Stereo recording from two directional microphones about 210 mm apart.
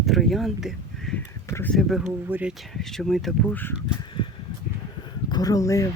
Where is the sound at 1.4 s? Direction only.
10° left (ahead or behind).